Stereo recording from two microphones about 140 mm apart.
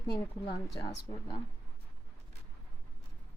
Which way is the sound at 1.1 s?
40° left (ahead or behind).